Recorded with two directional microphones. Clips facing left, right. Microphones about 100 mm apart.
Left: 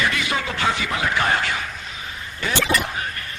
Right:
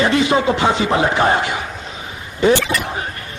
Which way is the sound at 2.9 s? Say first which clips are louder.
Right 4 dB; 25° right (ahead or behind).